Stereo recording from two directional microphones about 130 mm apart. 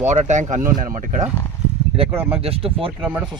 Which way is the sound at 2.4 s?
45° right (ahead or behind).